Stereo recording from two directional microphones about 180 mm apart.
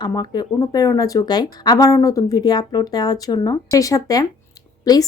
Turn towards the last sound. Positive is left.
turn(degrees=20)  # may be behind; listen again after turning